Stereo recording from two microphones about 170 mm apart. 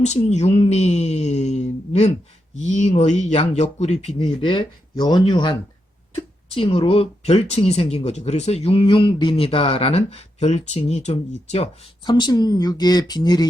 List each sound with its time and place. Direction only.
0.3 s speech: 40° left (ahead or behind)
12.0 s speech: 25° left (ahead or behind)